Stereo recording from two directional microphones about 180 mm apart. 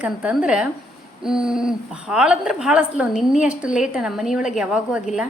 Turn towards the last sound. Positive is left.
turn(degrees=-5)  # may be behind; listen again after turning